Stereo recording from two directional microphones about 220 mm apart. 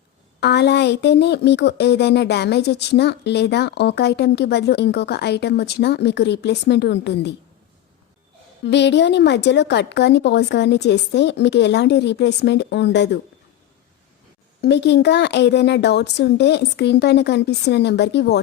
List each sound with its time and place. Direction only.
0.3 s speech: 50° left (ahead or behind)
8.6 s speech: 50° left (ahead or behind)
14.6 s speech: 50° left (ahead or behind)